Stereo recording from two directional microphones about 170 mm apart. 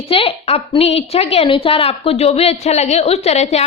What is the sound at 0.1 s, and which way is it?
A woman's voice, 35° left (ahead or behind).